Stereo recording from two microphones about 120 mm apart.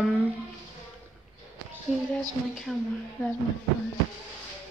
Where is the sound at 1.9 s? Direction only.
5° right (ahead or behind).